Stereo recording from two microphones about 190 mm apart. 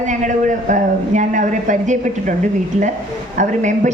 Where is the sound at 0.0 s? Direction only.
40° right (ahead or behind).